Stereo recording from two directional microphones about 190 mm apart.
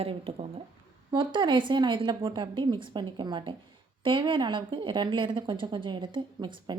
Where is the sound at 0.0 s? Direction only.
30° right (ahead or behind).